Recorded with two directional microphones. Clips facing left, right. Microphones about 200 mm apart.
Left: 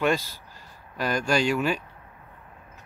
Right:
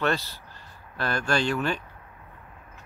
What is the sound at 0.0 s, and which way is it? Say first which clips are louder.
Speech: left 2 dB; 10° left (ahead or behind).